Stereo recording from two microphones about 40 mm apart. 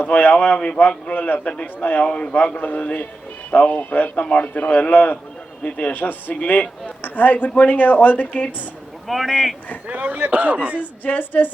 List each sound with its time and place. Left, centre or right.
0.2 s speech: left
0.5 s a man's voice: left
1.1 s speech: left
2.0 s a man's voice: left
2.6 s a man's voice: left
4.1 s a man's voice: left
5.6 s speech: left
9.0 s a man's voice: centre
9.8 s a man's voice: right
11.0 s speech: left